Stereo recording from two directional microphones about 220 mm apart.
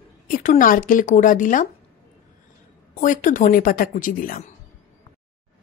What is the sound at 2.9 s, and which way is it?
Speech, 40° left (ahead or behind).